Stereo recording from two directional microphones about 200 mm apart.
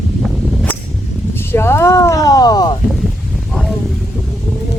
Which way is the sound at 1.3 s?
10° left (ahead or behind).